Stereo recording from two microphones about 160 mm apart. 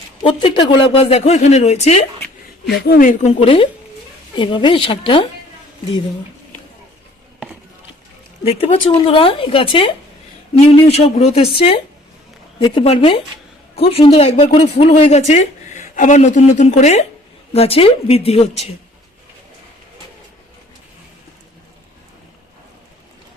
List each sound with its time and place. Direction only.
0.2 s speech: 35° left (ahead or behind)
2.8 s speech: 65° left (ahead or behind); by 5.2 s 30° left (ahead or behind)
8.4 s speech: 40° left (ahead or behind)
12.5 s speech: 30° left (ahead or behind)